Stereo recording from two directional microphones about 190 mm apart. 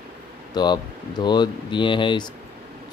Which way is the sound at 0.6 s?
25° left (ahead or behind).